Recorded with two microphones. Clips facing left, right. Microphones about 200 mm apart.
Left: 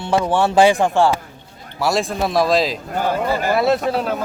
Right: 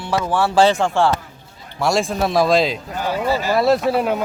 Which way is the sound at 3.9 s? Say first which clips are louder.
Right 2 dB; 5° right (ahead or behind).